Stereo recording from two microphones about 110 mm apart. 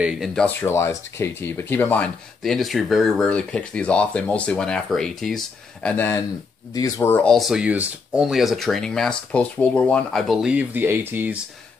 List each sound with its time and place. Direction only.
0.0 s speech: 10° right (ahead or behind)
0.5 s speech: 20° left (ahead or behind)
2.4 s speech: centre (ahead or behind)
5.9 s speech: 25° left (ahead or behind)
7.2 s speech: centre (ahead or behind)
10.5 s speech: 15° right (ahead or behind)